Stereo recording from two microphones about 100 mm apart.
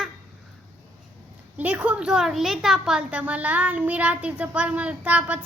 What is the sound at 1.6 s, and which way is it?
A child's voice, 15° right (ahead or behind).